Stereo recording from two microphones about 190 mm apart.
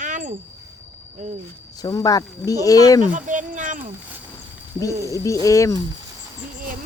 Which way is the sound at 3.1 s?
40° right (ahead or behind).